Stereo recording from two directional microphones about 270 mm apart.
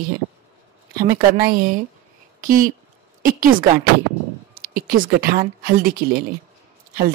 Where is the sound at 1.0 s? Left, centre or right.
Centre.